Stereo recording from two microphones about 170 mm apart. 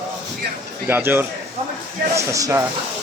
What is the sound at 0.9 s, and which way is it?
Speech, 10° right (ahead or behind).